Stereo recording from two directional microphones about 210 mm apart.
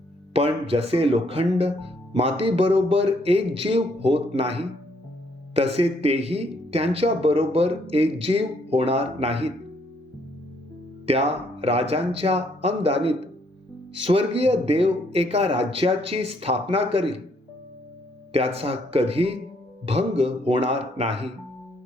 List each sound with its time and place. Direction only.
0.3 s speech: 25° right (ahead or behind)
11.0 s speech: 30° right (ahead or behind)
18.3 s speech: 30° right (ahead or behind)